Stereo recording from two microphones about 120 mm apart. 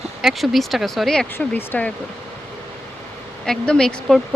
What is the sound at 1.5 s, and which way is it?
Speech, 15° left (ahead or behind).